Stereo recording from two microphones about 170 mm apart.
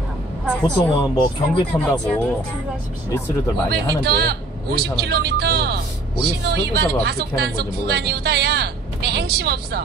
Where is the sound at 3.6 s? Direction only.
70° right (ahead or behind).